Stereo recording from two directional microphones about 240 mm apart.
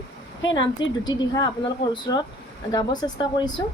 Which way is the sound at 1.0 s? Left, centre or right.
Centre.